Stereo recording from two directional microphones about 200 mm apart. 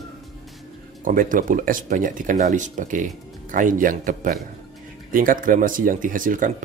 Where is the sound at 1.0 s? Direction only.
40° right (ahead or behind).